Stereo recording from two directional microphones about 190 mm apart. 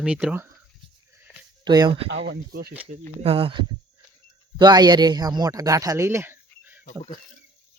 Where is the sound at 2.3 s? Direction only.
55° right (ahead or behind).